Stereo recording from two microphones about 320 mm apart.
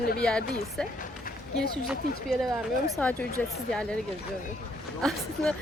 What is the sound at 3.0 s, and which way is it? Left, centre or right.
Speech, centre.